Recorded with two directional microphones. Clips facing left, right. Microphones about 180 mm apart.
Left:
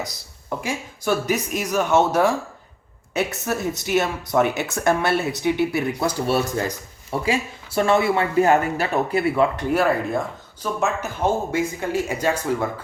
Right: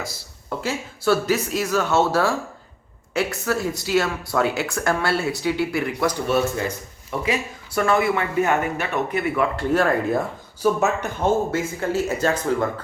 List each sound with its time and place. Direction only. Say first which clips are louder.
0.6 s speech: right 4 dB; 15° left (ahead or behind); by 9.5 s 30° left (ahead or behind)
9.6 s speech: even; 10° left (ahead or behind)
10.1 s speech: right 2 dB; 5° right (ahead or behind)
11.2 s speech: right 1 dB; 15° left (ahead or behind)